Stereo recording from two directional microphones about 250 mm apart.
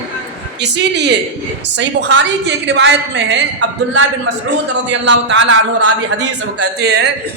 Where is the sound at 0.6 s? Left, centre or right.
Right.